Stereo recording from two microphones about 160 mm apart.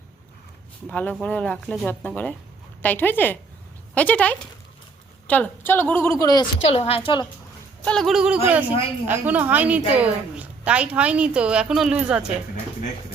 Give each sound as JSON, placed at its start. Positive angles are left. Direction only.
{"t": 0.9, "sound": "a woman's voice", "side_deg": 10}
{"t": 6.7, "sound": "a woman's voice", "side_deg": 40}
{"t": 7.9, "sound": "a woman's voice", "side_deg": 0}